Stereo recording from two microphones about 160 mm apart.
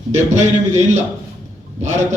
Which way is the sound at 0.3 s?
45° right (ahead or behind).